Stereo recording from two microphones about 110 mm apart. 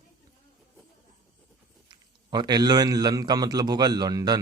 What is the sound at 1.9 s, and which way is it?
A man's voice, 40° right (ahead or behind).